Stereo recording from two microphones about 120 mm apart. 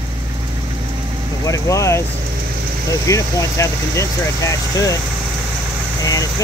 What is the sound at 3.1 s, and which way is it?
Speech, 25° left (ahead or behind).